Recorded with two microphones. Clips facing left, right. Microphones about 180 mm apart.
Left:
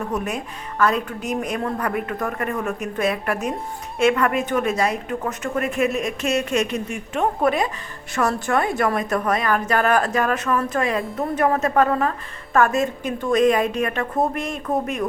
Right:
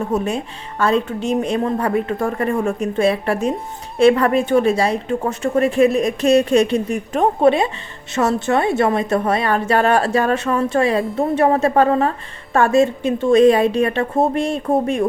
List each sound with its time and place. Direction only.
0.0 s a woman's voice: 25° right (ahead or behind)